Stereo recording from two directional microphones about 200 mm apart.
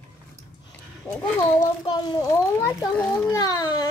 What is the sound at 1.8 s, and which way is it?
A child's voice, 20° left (ahead or behind).